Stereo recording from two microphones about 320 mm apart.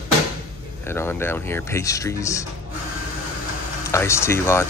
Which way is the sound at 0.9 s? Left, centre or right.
Centre.